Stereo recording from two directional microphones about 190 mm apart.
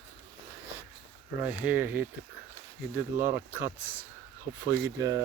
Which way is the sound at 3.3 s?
10° right (ahead or behind).